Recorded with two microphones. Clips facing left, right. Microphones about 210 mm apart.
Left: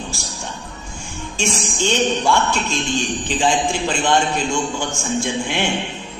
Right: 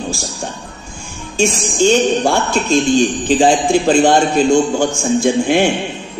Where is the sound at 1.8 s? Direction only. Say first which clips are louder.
Right 8 dB; 40° right (ahead or behind).